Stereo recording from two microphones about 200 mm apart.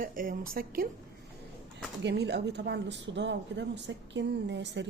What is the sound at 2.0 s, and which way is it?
A woman's voice, 55° right (ahead or behind).